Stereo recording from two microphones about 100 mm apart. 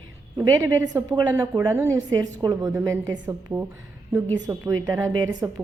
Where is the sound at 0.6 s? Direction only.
30° right (ahead or behind).